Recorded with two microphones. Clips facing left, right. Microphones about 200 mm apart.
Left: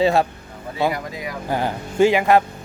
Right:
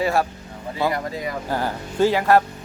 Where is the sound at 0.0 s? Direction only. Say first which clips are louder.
Left 4 dB; 25° left (ahead or behind).